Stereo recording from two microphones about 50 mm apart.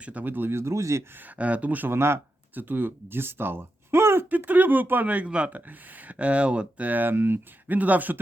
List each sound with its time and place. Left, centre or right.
0.0 s speech: right
0.5 s speech: right
1.1 s speech: right
1.9 s speech: right
2.6 s speech: right
4.3 s speech: right
6.8 s speech: right
7.7 s speech: right